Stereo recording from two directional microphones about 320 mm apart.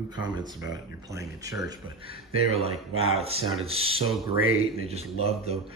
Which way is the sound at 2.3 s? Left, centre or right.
Right.